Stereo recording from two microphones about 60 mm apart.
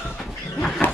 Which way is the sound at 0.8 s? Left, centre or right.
Left.